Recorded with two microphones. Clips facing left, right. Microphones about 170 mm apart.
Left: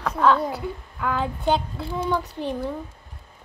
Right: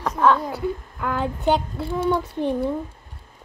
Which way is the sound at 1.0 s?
15° right (ahead or behind).